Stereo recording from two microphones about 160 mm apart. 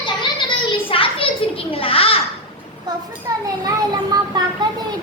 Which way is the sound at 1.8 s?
35° left (ahead or behind).